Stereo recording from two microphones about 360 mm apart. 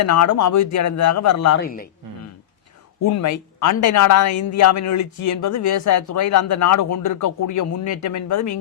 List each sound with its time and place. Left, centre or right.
0.0 s speech: left
1.5 s a man's voice: left
3.0 s speech: left